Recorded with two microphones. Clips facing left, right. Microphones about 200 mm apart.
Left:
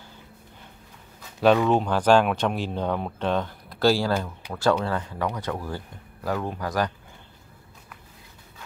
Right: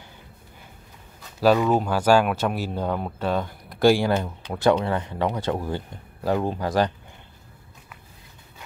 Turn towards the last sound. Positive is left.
turn(degrees=-25)  # may be behind; listen again after turning